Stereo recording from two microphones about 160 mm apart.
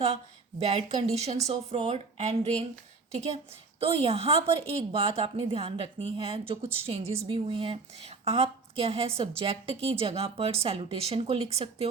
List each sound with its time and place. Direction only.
0.6 s a woman's voice: 40° right (ahead or behind)